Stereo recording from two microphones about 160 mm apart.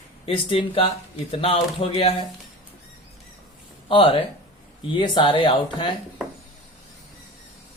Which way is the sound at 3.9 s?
35° left (ahead or behind).